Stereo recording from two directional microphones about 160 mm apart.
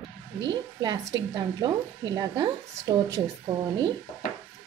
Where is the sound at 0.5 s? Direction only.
30° right (ahead or behind).